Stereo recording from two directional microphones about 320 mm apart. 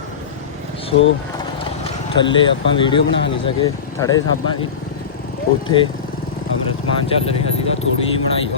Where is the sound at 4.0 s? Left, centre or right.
Centre.